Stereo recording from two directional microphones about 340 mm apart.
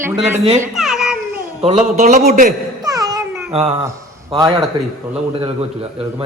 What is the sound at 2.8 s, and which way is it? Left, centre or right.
Music, centre.